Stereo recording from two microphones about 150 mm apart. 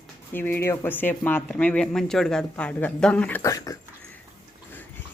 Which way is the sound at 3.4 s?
20° left (ahead or behind).